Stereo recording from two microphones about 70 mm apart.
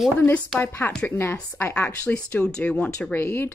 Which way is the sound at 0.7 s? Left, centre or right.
Left.